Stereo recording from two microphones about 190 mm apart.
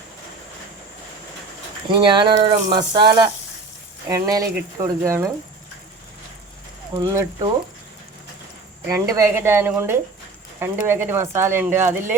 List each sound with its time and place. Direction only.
1.9 s speech: 25° right (ahead or behind)
6.9 s speech: 20° right (ahead or behind)
8.9 s speech: 15° right (ahead or behind)